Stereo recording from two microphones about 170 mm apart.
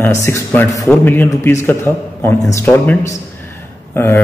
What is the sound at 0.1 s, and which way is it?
A man's voice, 15° left (ahead or behind).